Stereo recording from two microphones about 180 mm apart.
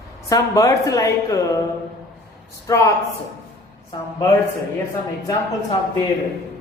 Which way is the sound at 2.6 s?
20° left (ahead or behind).